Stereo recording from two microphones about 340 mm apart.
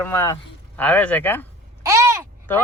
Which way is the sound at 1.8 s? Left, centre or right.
Centre.